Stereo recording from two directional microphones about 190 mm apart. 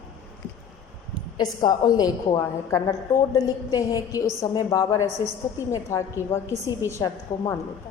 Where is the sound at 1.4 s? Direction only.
20° left (ahead or behind).